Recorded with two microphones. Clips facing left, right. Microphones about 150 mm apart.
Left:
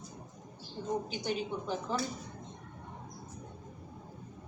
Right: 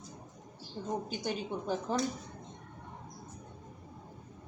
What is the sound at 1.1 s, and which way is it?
Speech, 45° right (ahead or behind).